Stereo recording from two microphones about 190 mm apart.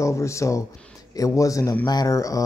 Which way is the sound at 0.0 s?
15° left (ahead or behind).